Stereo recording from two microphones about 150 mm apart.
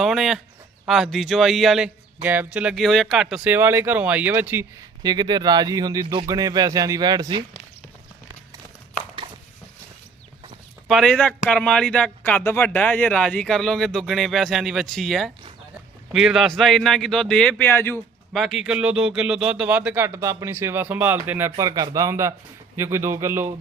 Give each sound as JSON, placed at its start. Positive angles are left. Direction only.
{"t": 0.0, "sound": "speech", "side_deg": 0}
{"t": 2.2, "sound": "speech", "side_deg": -10}
{"t": 5.0, "sound": "speech", "side_deg": -30}
{"t": 10.8, "sound": "speech", "side_deg": 5}
{"t": 18.3, "sound": "speech", "side_deg": 0}